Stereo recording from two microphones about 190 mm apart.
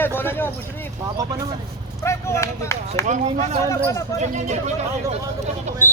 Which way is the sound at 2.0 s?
15° left (ahead or behind).